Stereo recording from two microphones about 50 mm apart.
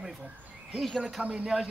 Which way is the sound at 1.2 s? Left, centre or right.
Right.